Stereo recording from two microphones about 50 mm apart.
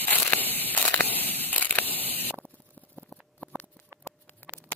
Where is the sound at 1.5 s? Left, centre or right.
Left.